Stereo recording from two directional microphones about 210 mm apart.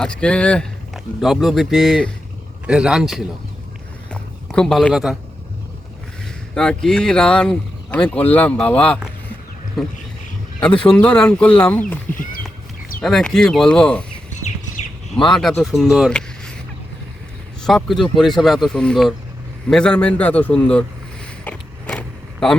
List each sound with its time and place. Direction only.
0.0 s speech: 5° left (ahead or behind)
4.1 s a sound: 5° left (ahead or behind)
6.5 s speech: 5° left (ahead or behind)
12.1 s speech: 40° left (ahead or behind)
13.0 s speech: centre (ahead or behind)
15.3 s speech: centre (ahead or behind)
17.6 s speech: centre (ahead or behind)
21.4 s vehicle: 5° left (ahead or behind)